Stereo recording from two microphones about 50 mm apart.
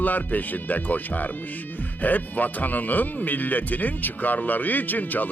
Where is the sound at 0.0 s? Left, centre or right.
Left.